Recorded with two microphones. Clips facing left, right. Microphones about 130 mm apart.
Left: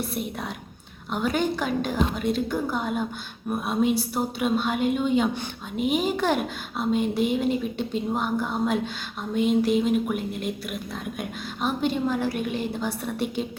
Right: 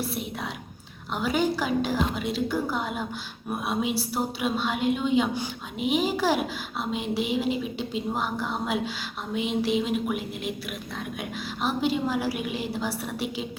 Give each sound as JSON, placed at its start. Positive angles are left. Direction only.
{"t": 0.0, "sound": "speech", "side_deg": 0}
{"t": 7.5, "sound": "speech", "side_deg": 45}
{"t": 8.1, "sound": "a woman's voice", "side_deg": 0}
{"t": 13.2, "sound": "speech", "side_deg": 45}